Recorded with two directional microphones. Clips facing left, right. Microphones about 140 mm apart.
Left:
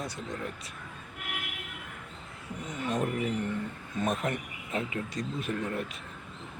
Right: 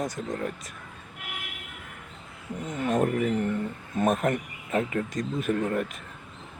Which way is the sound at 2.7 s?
50° right (ahead or behind).